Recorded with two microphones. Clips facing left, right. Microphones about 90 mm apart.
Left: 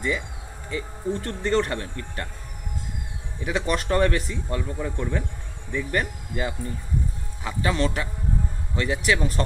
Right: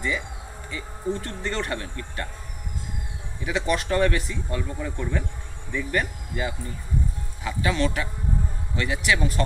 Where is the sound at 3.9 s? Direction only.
40° left (ahead or behind).